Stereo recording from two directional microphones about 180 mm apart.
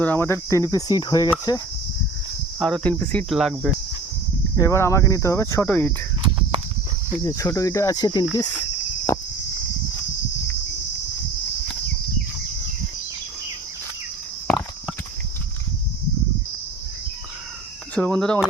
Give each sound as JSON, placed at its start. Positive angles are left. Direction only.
{"t": 0.0, "sound": "speech", "side_deg": 10}
{"t": 2.6, "sound": "cricket", "side_deg": 5}
{"t": 4.5, "sound": "speech", "side_deg": 15}
{"t": 7.2, "sound": "cricket", "side_deg": 20}
{"t": 17.9, "sound": "cricket", "side_deg": 5}